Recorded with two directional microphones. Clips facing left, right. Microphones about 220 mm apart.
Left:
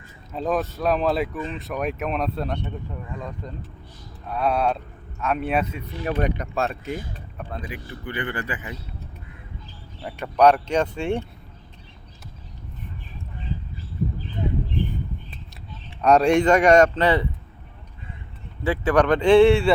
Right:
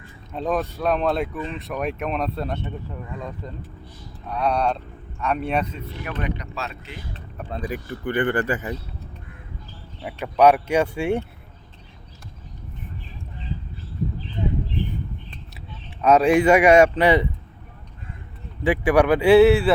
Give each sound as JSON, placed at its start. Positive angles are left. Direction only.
{"t": 0.3, "sound": "speech", "side_deg": 0}
{"t": 6.1, "sound": "speech", "side_deg": 50}
{"t": 7.5, "sound": "speech", "side_deg": -35}
{"t": 8.0, "sound": "speech", "side_deg": -50}
{"t": 10.0, "sound": "a man's voice", "side_deg": -10}
{"t": 16.0, "sound": "a man's voice", "side_deg": 0}
{"t": 18.6, "sound": "a man's voice", "side_deg": -15}